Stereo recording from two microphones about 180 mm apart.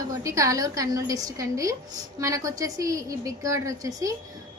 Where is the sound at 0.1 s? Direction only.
20° right (ahead or behind).